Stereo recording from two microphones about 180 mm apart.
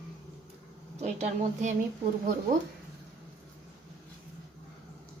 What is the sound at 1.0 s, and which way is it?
Speech, 40° right (ahead or behind).